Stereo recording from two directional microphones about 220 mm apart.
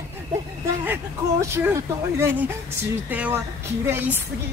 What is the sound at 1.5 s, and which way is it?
Speech, 10° right (ahead or behind).